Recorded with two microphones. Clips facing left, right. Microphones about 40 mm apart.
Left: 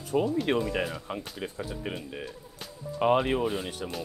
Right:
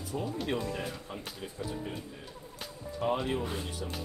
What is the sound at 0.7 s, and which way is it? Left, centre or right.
Speech, left.